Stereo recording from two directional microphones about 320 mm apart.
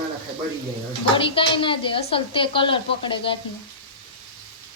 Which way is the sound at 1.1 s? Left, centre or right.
Centre.